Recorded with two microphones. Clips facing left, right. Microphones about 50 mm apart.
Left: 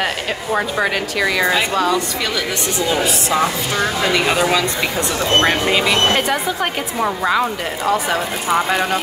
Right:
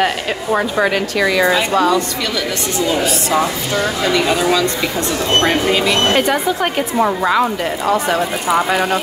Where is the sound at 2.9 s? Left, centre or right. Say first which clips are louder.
Right 1 dB; centre.